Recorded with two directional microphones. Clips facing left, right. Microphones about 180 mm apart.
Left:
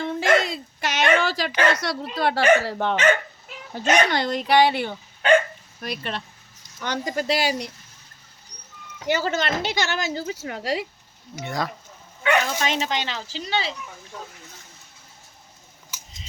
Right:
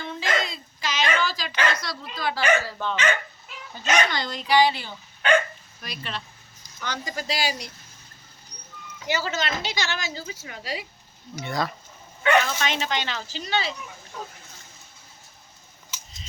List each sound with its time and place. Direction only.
0.0 s dog: 60° left (ahead or behind)
2.1 s a woman's voice: 65° left (ahead or behind)
9.0 s a woman's voice: 50° left (ahead or behind); by 10.8 s 65° left (ahead or behind)
11.3 s speech: 15° left (ahead or behind)
12.5 s speech: 35° left (ahead or behind)